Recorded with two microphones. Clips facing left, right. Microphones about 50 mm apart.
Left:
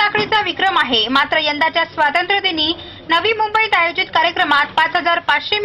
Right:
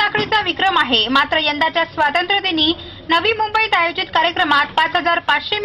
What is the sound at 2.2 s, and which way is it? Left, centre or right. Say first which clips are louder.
Speech: even; left.